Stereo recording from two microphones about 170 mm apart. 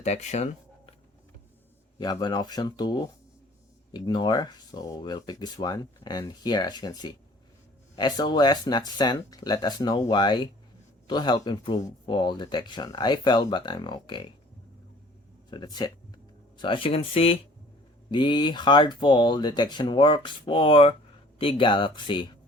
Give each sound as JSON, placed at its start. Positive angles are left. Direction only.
{"t": 0.0, "sound": "speech", "side_deg": 40}
{"t": 2.0, "sound": "speech", "side_deg": 25}
{"t": 15.4, "sound": "speech", "side_deg": 25}